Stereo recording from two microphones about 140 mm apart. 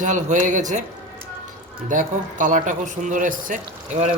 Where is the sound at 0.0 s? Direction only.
60° right (ahead or behind).